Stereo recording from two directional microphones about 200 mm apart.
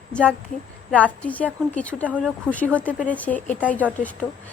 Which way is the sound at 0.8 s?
5° left (ahead or behind).